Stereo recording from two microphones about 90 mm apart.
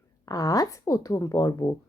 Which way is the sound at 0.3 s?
45° left (ahead or behind).